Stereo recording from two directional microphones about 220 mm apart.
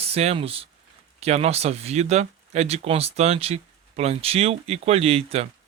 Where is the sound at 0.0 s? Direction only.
30° right (ahead or behind).